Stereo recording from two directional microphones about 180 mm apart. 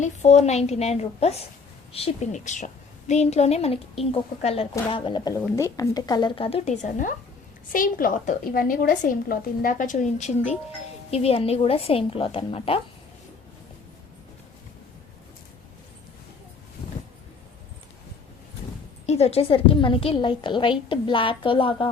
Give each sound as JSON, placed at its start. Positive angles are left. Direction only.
{"t": 0.0, "sound": "a woman's voice", "side_deg": 40}
{"t": 19.0, "sound": "a woman's voice", "side_deg": 35}